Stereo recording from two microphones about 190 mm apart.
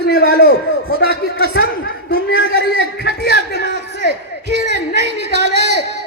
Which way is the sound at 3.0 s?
60° left (ahead or behind).